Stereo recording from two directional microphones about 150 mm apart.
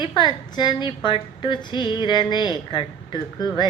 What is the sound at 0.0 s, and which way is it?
A woman's voice, 30° left (ahead or behind).